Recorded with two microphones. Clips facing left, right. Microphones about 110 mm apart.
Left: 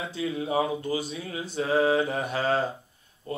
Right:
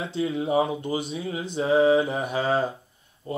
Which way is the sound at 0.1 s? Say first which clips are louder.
Right 4 dB; 25° right (ahead or behind).